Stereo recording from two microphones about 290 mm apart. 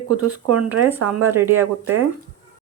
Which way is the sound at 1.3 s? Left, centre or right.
Centre.